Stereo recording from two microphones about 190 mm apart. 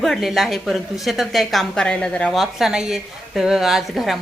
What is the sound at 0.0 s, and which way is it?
A woman's voice, centre (ahead or behind).